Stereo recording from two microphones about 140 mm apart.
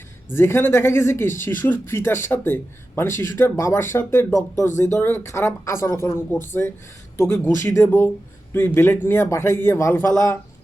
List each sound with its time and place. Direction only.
0.3 s speech: 15° left (ahead or behind)